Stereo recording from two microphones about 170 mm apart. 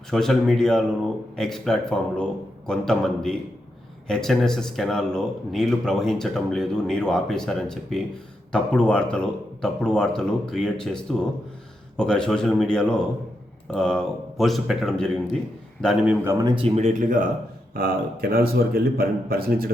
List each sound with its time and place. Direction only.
0.1 s speech: centre (ahead or behind)
16.2 s speech: 15° right (ahead or behind)
16.6 s speech: 35° right (ahead or behind)
17.7 s a man's voice: 60° right (ahead or behind)